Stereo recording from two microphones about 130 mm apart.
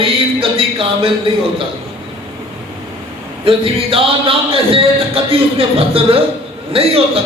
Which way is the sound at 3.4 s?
45° right (ahead or behind).